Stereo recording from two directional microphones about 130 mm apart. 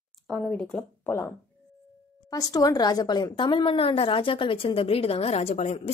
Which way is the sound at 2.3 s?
30° left (ahead or behind).